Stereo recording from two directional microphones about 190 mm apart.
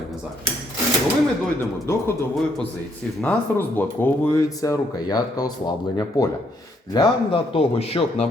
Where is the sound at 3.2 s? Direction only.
10° left (ahead or behind).